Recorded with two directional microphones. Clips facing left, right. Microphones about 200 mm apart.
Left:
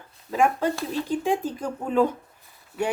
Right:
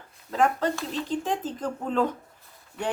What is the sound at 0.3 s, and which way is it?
Speech, 10° left (ahead or behind).